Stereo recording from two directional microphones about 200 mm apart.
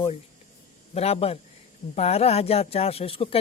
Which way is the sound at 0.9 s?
30° left (ahead or behind).